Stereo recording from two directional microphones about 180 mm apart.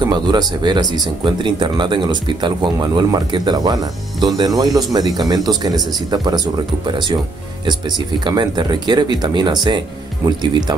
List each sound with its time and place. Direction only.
0.0 s speech: 20° right (ahead or behind)
8.2 s speech: 25° right (ahead or behind)